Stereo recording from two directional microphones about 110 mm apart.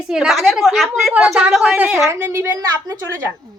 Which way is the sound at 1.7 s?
15° right (ahead or behind).